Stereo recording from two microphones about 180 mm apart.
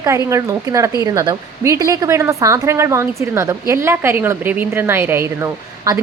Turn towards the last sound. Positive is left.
turn(degrees=-15)  # may be behind; listen again after turning